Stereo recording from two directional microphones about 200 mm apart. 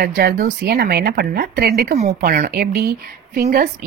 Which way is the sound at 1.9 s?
40° right (ahead or behind).